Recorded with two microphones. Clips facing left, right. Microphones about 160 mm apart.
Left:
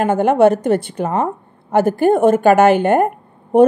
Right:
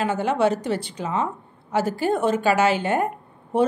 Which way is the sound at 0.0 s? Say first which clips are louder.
Left 9 dB; 55° left (ahead or behind).